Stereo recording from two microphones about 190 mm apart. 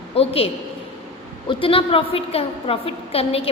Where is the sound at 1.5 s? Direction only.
30° left (ahead or behind).